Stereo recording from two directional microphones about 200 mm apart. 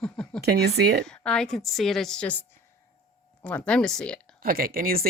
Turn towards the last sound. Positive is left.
turn(degrees=-45)  # may be behind; listen again after turning